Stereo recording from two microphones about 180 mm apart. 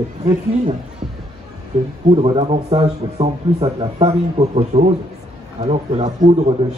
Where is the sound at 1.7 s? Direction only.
35° right (ahead or behind).